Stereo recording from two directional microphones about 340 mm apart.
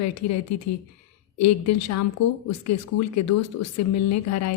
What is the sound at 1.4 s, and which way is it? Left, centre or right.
Speech, left.